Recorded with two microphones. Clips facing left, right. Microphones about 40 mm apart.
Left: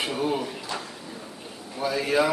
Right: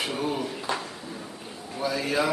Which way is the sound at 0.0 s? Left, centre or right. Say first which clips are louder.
Left 2 dB; centre.